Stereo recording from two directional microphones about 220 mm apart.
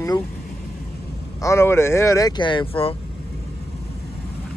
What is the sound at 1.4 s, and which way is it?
Speech, 10° left (ahead or behind).